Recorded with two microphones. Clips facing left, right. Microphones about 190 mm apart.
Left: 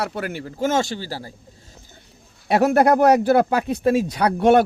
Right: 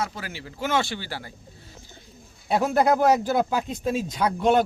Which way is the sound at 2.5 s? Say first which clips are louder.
Left 5 dB; 70° left (ahead or behind).